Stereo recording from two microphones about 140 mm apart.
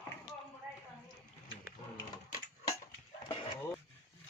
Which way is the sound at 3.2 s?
35° left (ahead or behind).